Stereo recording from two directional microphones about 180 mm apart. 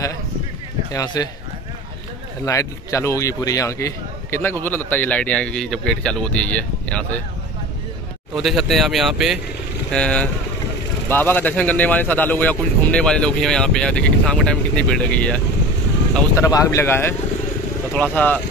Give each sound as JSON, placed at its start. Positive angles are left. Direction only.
{"t": 0.9, "sound": "speech", "side_deg": 20}
{"t": 2.4, "sound": "a man's voice", "side_deg": 15}
{"t": 8.4, "sound": "a man's voice", "side_deg": 0}